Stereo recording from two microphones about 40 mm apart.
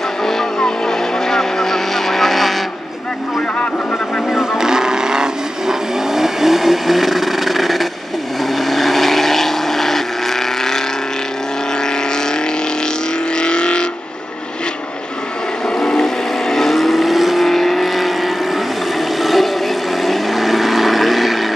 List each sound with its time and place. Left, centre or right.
0.6 s vehicle: centre
4.4 s vehicle: centre
13.4 s vehicle: left
16.4 s vehicle: centre
19.2 s a sound: centre
20.0 s vehicle: centre